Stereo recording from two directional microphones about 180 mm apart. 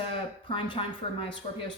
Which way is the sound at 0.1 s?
30° left (ahead or behind).